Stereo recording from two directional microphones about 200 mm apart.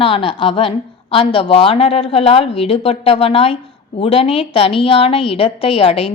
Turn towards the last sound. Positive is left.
turn(degrees=30)  # may be behind; listen again after turning